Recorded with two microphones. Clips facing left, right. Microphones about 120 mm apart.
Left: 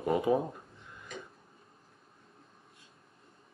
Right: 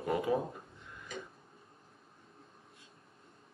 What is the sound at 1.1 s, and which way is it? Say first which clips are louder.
Tick-tock: right 1 dB; centre (ahead or behind).